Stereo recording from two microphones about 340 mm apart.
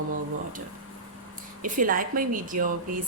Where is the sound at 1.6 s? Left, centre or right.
Right.